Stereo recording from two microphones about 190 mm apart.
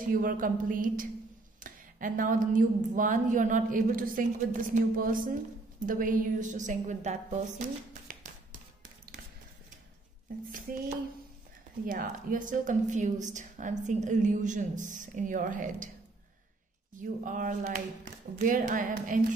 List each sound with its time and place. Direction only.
0.0 s a woman's voice: 45° right (ahead or behind)
8.1 s music: 45° right (ahead or behind)
11.8 s a woman's voice: 45° right (ahead or behind)
17.0 s speech: 45° right (ahead or behind)